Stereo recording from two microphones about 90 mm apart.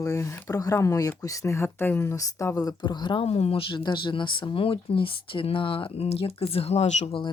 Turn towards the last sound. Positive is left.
turn(degrees=70)  # may be behind; listen again after turning